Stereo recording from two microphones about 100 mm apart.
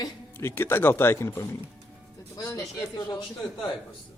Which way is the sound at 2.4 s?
40° left (ahead or behind).